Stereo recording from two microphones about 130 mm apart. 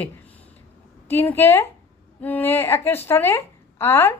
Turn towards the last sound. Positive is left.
turn(degrees=15)  # may be behind; listen again after turning